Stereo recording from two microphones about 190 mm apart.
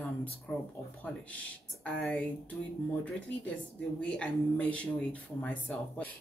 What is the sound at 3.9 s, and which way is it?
Speech, 5° left (ahead or behind).